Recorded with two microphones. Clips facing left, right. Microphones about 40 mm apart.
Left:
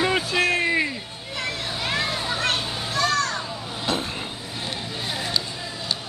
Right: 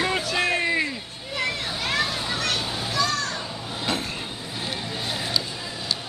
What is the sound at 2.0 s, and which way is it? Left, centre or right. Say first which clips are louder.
Children playing: left 2 dB; left.